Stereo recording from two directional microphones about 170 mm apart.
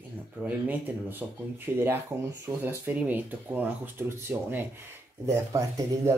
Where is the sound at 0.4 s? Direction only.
10° right (ahead or behind).